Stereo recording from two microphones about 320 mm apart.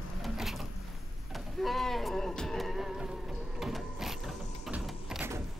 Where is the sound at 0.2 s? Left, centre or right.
Centre.